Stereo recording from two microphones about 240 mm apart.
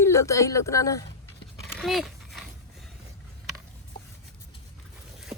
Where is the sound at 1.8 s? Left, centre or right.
Centre.